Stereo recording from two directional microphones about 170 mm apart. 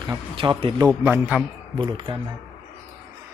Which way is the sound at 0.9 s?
10° right (ahead or behind).